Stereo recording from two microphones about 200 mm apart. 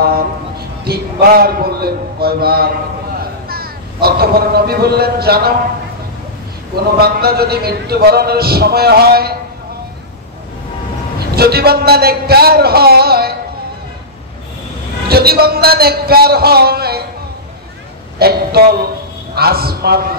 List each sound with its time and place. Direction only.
0.8 s a man's voice: 50° right (ahead or behind)
7.0 s speech: 50° right (ahead or behind)
11.3 s speech: 50° right (ahead or behind)
15.0 s speech: 50° right (ahead or behind)
18.2 s a sound: 50° right (ahead or behind)
19.3 s speech: 50° right (ahead or behind)